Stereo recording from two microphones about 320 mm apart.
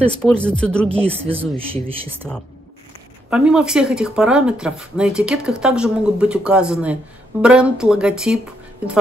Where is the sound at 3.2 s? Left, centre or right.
Centre.